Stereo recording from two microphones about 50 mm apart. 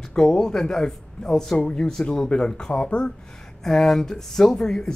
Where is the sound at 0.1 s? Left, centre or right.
Centre.